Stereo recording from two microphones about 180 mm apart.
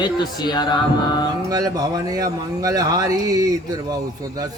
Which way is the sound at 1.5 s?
20° right (ahead or behind).